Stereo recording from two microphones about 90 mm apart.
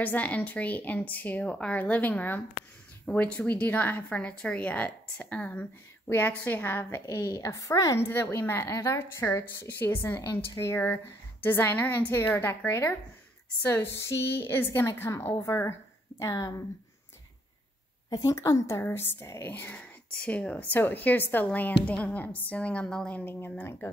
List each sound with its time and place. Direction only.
0.0 s a woman's voice: 15° left (ahead or behind); by 8.0 s 40° left (ahead or behind)
8.0 s a woman's voice: 25° left (ahead or behind)
18.1 s a woman's voice: 40° left (ahead or behind)
19.5 s a woman's voice: 20° left (ahead or behind)